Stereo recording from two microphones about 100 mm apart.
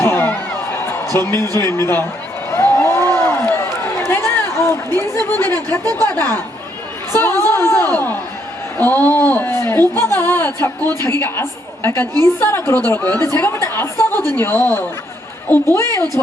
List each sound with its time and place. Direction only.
0.0 s a sound: 25° left (ahead or behind)
1.3 s speech: 30° left (ahead or behind)
2.5 s run: 25° left (ahead or behind)
6.0 s speech: 20° left (ahead or behind)
7.2 s a sound: 25° left (ahead or behind)
8.8 s a man's voice: 20° left (ahead or behind)